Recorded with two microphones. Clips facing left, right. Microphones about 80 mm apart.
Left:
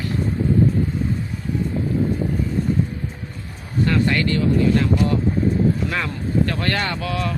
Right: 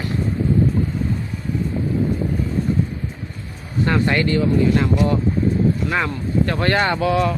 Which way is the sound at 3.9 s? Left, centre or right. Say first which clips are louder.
Right 2 dB; right.